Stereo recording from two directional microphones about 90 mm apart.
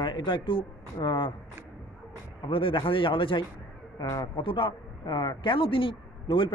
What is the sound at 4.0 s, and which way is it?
Speech, 45° left (ahead or behind).